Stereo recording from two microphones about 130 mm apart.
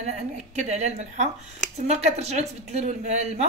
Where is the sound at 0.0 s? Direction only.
60° right (ahead or behind).